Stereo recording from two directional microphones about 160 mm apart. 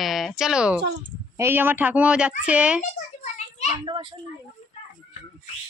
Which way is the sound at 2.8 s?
50° left (ahead or behind).